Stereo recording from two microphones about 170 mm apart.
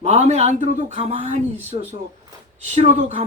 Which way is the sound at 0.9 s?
35° right (ahead or behind).